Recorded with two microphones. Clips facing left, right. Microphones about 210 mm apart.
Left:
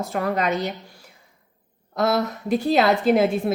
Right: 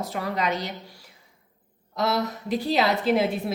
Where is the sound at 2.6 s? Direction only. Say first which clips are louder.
Left 5 dB; 50° left (ahead or behind).